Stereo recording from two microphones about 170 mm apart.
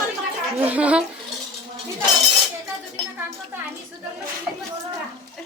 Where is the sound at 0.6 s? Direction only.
10° right (ahead or behind).